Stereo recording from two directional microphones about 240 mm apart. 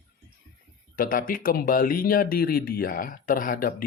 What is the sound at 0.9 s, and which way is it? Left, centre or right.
Speech, left.